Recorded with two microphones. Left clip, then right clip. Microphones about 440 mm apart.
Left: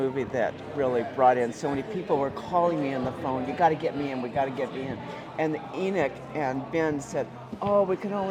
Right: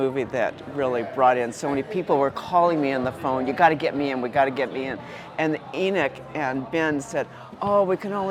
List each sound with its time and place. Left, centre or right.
0.0 s speech: right